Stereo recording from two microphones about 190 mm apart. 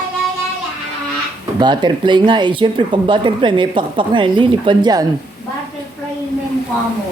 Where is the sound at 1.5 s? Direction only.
25° right (ahead or behind).